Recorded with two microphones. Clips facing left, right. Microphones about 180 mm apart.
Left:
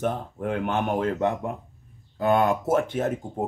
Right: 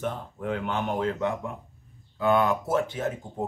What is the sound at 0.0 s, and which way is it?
Speech, 50° left (ahead or behind).